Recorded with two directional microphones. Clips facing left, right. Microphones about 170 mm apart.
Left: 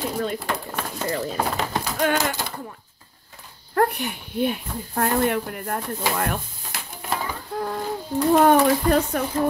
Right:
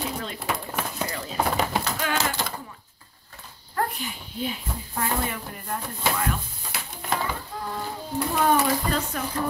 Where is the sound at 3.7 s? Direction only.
65° left (ahead or behind).